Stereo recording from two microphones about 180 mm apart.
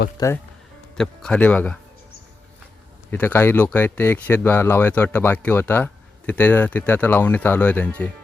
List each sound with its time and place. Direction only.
0.2 s speech: 20° left (ahead or behind)
0.9 s speech: 5° left (ahead or behind)
3.1 s speech: 10° left (ahead or behind)